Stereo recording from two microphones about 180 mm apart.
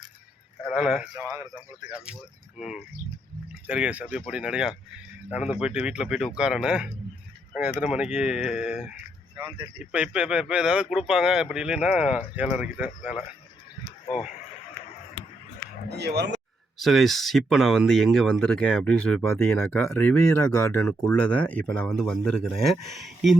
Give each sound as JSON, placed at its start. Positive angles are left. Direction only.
{"t": 0.7, "sound": "speech", "side_deg": -5}
{"t": 2.6, "sound": "speech", "side_deg": -5}
{"t": 15.9, "sound": "speech", "side_deg": -70}
{"t": 16.7, "sound": "speech", "side_deg": 0}